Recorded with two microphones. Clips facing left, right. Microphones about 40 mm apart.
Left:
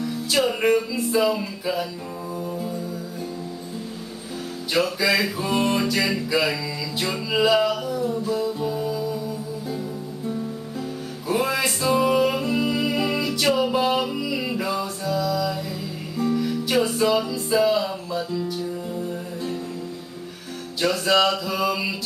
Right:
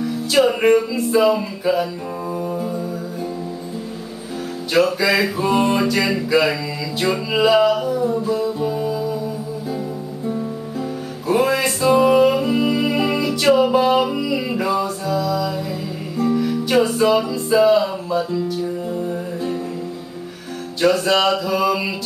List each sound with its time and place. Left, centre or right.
0.0 s music: centre
4.7 s music: centre
10.2 s music: centre
20.8 s music: centre